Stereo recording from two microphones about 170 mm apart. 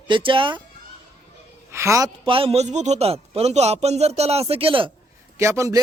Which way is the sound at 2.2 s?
30° right (ahead or behind).